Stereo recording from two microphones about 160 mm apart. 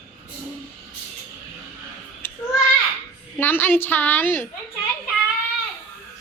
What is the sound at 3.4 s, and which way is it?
A woman's voice, 10° left (ahead or behind).